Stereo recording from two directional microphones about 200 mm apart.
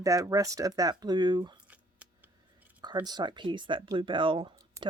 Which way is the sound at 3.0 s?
20° right (ahead or behind).